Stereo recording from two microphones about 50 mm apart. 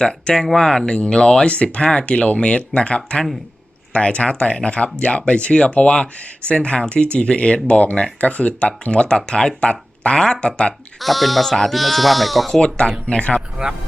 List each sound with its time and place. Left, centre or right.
0.0 s speech: centre
11.0 s speech: centre
12.6 s speech: left
13.6 s speech: centre